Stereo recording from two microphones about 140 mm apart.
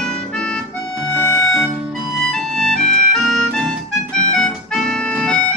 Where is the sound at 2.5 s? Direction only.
Centre (ahead or behind).